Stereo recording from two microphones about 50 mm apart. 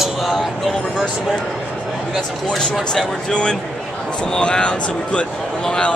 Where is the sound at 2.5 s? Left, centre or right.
Centre.